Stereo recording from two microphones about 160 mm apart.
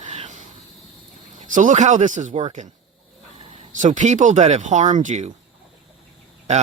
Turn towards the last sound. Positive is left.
turn(degrees=-45)  # may be behind; listen again after turning